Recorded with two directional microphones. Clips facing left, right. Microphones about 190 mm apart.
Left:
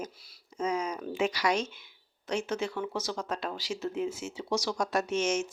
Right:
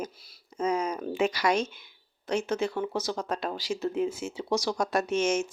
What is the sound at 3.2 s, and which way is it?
Speech, 50° right (ahead or behind).